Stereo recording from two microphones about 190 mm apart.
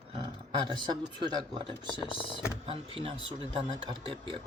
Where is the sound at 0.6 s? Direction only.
25° right (ahead or behind).